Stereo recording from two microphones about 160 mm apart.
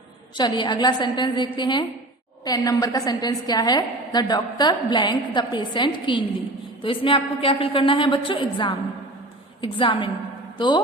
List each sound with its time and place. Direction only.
0.3 s a woman's voice: 30° left (ahead or behind)